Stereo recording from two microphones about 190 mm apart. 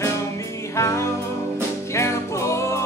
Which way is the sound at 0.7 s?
15° left (ahead or behind).